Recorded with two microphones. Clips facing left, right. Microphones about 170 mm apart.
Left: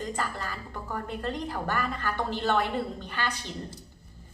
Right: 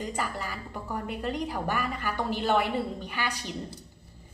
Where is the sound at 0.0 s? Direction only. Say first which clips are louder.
Even; 10° right (ahead or behind).